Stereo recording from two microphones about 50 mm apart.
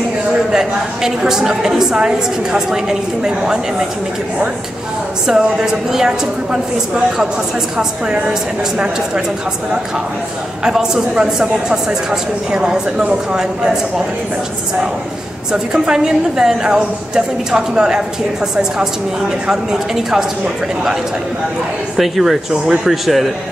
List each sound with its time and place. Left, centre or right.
0.5 s a man's voice: centre
5.2 s a man's voice: centre
8.7 s speech: right
10.6 s a man's voice: centre
15.5 s a man's voice: centre
19.4 s a man's voice: centre
21.9 s speech: centre